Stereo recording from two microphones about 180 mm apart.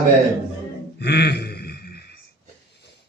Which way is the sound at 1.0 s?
65° left (ahead or behind).